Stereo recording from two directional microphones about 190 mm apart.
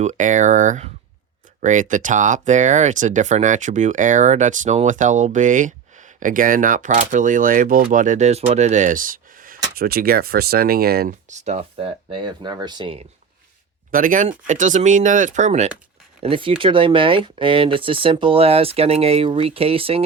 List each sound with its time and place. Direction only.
0.0 s speech: 40° right (ahead or behind)
11.3 s speech: 35° right (ahead or behind)
12.1 s speech: 25° right (ahead or behind)
13.9 s speech: 45° right (ahead or behind); by 20.1 s 30° right (ahead or behind)